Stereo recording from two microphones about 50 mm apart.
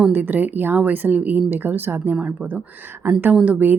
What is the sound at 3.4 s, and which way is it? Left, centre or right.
Speech, right.